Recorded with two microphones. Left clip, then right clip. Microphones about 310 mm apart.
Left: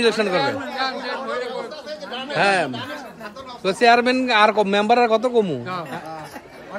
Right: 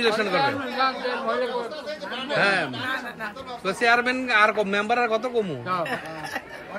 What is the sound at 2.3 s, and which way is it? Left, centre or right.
Speech, centre.